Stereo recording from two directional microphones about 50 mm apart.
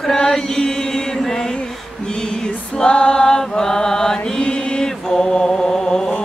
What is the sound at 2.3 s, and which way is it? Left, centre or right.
Mantra, centre.